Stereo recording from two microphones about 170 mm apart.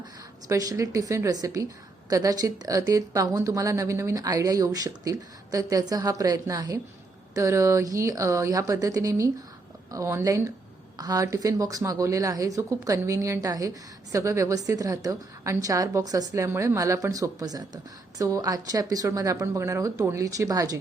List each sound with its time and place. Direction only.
0.4 s a woman's voice: 20° right (ahead or behind)